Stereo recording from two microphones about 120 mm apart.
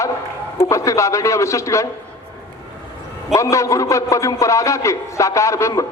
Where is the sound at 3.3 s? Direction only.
25° left (ahead or behind).